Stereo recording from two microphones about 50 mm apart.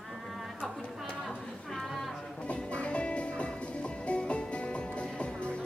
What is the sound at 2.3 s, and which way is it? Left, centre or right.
Music, left.